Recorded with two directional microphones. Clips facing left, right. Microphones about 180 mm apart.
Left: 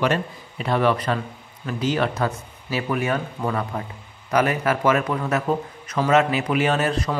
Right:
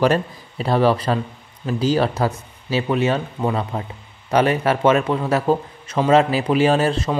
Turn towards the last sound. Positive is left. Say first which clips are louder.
# right 4 dB
turn(degrees=-30)  # may be behind; listen again after turning